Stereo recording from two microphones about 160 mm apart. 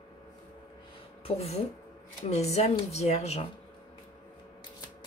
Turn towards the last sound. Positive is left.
turn(degrees=40)  # may be behind; listen again after turning